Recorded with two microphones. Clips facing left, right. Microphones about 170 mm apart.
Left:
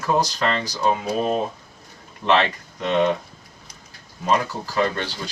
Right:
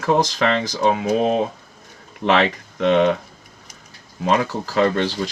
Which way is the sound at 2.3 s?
90° right.